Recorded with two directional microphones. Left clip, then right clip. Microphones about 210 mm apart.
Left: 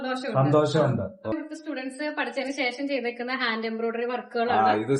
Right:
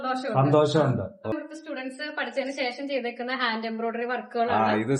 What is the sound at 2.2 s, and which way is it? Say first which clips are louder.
A woman's voice: even; centre (ahead or behind).